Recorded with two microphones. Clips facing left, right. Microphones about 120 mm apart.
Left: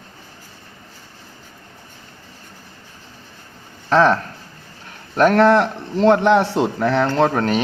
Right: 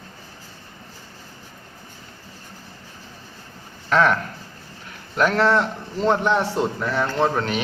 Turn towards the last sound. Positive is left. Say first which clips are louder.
# left 5 dB
turn(degrees=45)  # may be behind; listen again after turning